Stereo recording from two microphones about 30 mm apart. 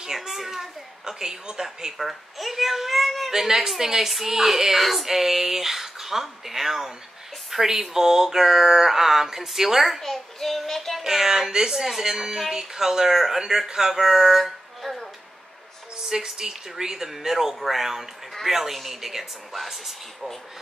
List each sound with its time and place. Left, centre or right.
0.0 s a child's voice: centre
2.0 s a child's voice: centre
3.3 s speech: centre
10.0 s child singing: centre
11.1 s speech: centre
11.8 s speech: centre
12.1 s speech: right
14.3 s a sound: centre
16.1 s speech: centre